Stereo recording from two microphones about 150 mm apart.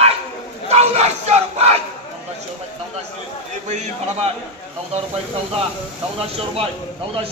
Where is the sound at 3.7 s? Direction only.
50° right (ahead or behind).